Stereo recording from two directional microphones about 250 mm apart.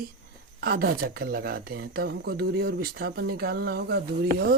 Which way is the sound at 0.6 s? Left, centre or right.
Right.